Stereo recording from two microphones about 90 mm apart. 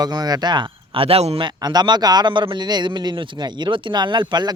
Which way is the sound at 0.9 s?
90° right.